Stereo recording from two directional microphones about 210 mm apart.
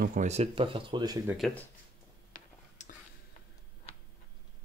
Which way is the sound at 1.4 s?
Centre (ahead or behind).